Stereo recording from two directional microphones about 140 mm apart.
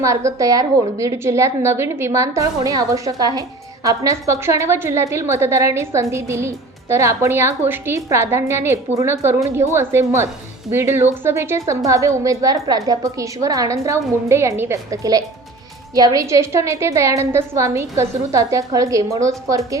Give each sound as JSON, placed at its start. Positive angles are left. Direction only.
{"t": 0.0, "sound": "a woman's voice", "side_deg": -20}